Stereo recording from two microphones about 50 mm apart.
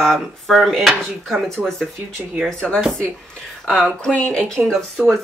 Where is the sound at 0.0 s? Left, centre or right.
Centre.